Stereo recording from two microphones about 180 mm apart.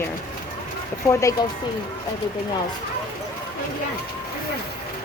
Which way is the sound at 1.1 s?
15° left (ahead or behind).